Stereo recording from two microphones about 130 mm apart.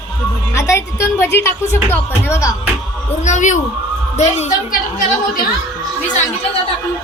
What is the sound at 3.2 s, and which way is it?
A woman's voice, 65° left (ahead or behind).